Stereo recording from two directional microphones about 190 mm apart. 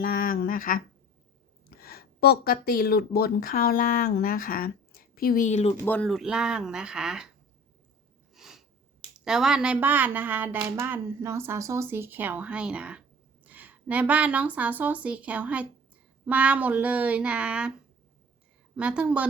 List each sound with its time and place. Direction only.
0.0 s speech: 50° left (ahead or behind)
1.8 s speech: 55° left (ahead or behind); by 5.7 s 35° left (ahead or behind)
5.8 s speech: 10° left (ahead or behind)
8.4 s sniff: centre (ahead or behind)
9.1 s speech: 5° right (ahead or behind)
18.8 s speech: 5° right (ahead or behind)